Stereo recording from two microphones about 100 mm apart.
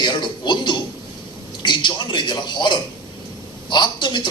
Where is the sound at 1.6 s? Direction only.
50° left (ahead or behind).